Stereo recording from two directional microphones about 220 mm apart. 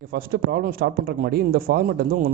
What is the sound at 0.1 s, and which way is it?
A man's voice, 45° right (ahead or behind).